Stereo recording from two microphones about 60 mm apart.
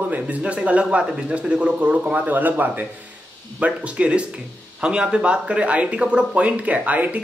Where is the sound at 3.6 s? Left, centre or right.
Centre.